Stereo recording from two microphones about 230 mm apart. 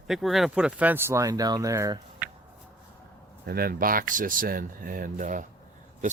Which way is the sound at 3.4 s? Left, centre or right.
Right.